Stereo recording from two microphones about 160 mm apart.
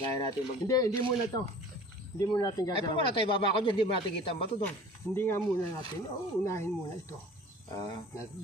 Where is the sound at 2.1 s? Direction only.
25° left (ahead or behind).